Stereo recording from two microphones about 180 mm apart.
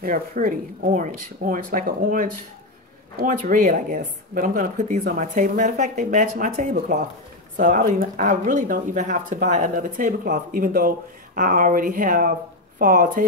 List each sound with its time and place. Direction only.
0.0 s speech: 50° right (ahead or behind)